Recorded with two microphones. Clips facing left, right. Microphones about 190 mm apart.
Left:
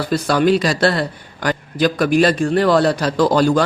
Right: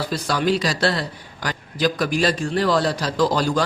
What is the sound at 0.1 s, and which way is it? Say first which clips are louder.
Speech: left 8 dB; 55° left (ahead or behind).